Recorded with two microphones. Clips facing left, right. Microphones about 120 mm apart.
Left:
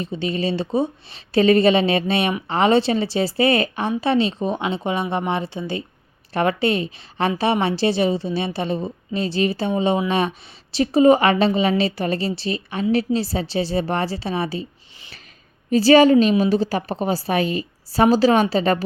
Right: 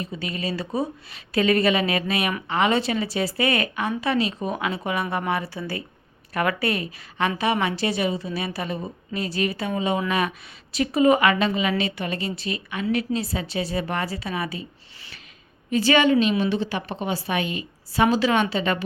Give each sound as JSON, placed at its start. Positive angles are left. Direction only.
{"t": 0.0, "sound": "a woman's voice", "side_deg": 30}